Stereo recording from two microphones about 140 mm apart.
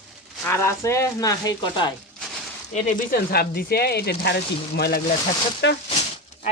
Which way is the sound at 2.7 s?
75° left (ahead or behind).